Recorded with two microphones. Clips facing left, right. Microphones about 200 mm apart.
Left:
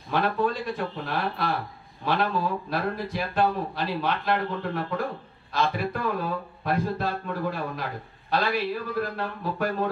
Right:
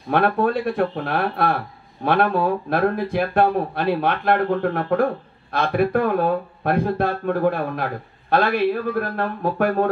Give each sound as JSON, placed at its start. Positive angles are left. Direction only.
{"t": 0.1, "sound": "speech", "side_deg": -60}